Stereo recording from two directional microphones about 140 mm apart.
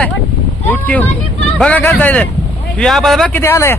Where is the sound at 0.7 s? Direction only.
10° left (ahead or behind).